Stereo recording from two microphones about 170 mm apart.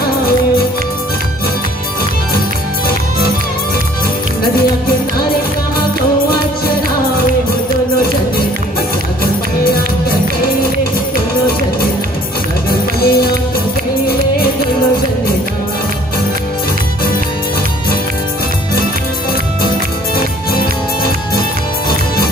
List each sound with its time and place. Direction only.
12.6 s music: 65° left (ahead or behind)
20.2 s music: 60° left (ahead or behind)